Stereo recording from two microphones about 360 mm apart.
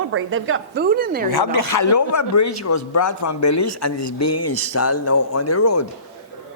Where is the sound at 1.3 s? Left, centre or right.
Left.